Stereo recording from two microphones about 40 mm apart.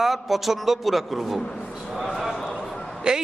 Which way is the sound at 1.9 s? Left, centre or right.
Centre.